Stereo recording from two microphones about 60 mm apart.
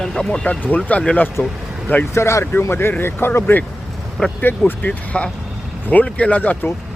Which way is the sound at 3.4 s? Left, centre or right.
Left.